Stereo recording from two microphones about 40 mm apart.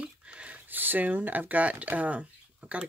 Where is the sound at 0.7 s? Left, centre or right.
Right.